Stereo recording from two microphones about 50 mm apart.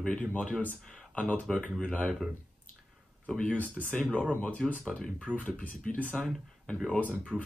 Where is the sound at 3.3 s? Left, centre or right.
Left.